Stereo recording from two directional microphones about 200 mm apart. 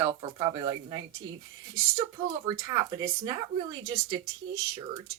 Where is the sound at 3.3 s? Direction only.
20° right (ahead or behind).